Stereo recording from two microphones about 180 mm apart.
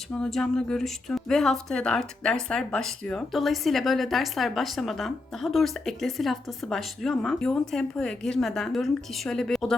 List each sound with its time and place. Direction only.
0.2 s speech: 5° left (ahead or behind)